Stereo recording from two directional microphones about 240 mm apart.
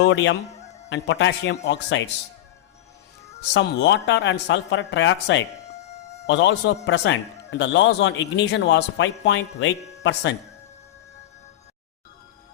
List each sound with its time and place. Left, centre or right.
0.0 s speech: left
3.5 s speech: left